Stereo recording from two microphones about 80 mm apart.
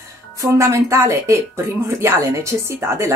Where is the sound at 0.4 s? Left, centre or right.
Right.